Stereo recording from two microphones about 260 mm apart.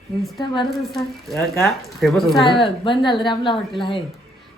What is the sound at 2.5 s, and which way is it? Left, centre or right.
A woman's voice, centre.